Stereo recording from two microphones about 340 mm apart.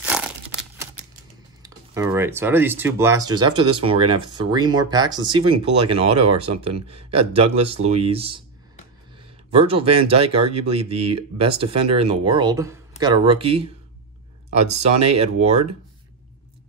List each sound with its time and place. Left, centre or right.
0.0 s crumpling: centre
1.6 s speech: centre
9.5 s speech: centre
14.7 s speech: centre